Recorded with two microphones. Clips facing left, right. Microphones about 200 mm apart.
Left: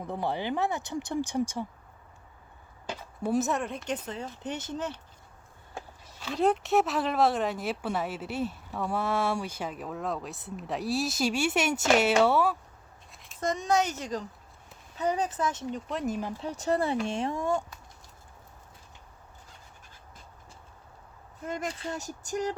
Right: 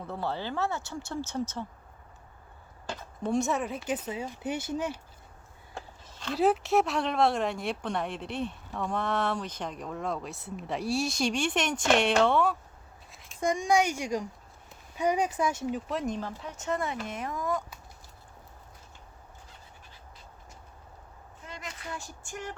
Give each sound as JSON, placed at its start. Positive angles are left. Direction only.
{"t": 0.0, "sound": "speech", "side_deg": 15}
{"t": 2.9, "sound": "speech", "side_deg": 10}
{"t": 5.7, "sound": "a sound", "side_deg": 10}
{"t": 6.3, "sound": "speech", "side_deg": -5}
{"t": 13.4, "sound": "speech", "side_deg": -10}
{"t": 16.4, "sound": "speech", "side_deg": 35}
{"t": 21.4, "sound": "speech", "side_deg": 50}
{"t": 21.7, "sound": "speech", "side_deg": 30}
{"t": 21.9, "sound": "speech", "side_deg": 40}